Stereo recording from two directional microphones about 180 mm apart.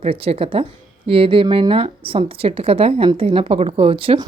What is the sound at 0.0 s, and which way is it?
Speech, 35° right (ahead or behind).